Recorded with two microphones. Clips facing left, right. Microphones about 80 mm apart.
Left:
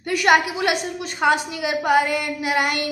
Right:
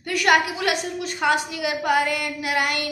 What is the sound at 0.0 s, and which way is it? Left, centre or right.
A woman's voice, centre.